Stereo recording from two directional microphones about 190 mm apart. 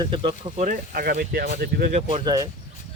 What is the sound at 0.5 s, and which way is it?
Speech, 45° right (ahead or behind).